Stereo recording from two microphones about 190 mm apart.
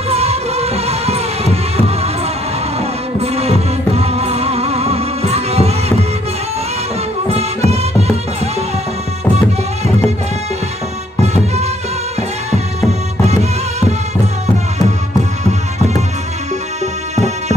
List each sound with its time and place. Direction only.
0.1 s music: 35° right (ahead or behind)
3.2 s music: 35° right (ahead or behind)
7.2 s music: 35° right (ahead or behind)
11.3 s music: 35° right (ahead or behind)
13.2 s music: 35° right (ahead or behind)
17.1 s music: 35° right (ahead or behind)